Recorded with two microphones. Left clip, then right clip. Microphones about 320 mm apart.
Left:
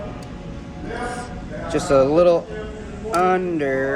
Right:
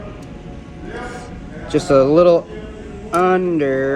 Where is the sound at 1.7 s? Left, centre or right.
Centre.